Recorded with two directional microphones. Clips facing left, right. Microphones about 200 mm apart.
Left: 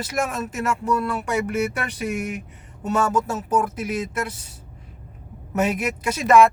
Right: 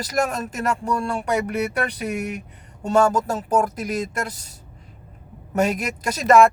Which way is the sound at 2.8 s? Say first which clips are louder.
Right 3 dB; 30° right (ahead or behind).